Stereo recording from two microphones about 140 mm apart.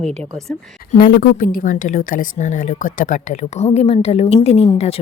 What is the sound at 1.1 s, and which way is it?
A woman's voice, 85° left.